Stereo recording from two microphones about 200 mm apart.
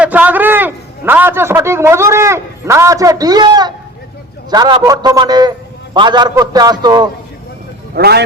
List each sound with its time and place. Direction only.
0.0 s a man's voice: 5° right (ahead or behind)
7.9 s speech: 55° right (ahead or behind)